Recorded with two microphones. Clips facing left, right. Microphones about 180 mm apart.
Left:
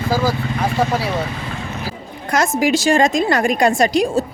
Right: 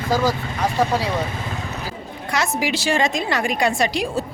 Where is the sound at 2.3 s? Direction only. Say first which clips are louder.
Left 6 dB; 45° left (ahead or behind).